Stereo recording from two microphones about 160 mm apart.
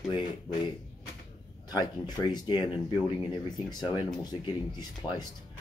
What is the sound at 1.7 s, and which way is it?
Speech, 25° left (ahead or behind).